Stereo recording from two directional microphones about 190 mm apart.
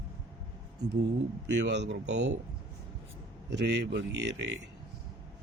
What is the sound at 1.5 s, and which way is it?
Speech, 65° right (ahead or behind).